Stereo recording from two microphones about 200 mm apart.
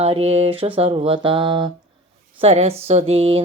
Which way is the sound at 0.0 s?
30° right (ahead or behind).